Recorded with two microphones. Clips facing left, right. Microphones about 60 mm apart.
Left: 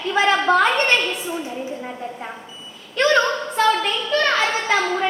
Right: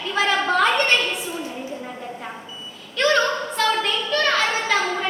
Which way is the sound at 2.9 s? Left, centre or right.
Centre.